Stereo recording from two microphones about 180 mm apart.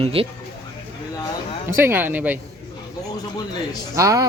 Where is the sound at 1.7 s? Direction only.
15° right (ahead or behind).